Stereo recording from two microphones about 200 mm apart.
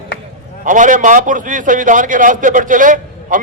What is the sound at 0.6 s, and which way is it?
A man's voice, 40° right (ahead or behind).